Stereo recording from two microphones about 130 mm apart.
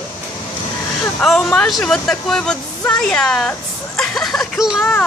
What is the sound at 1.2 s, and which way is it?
Speech, 5° left (ahead or behind).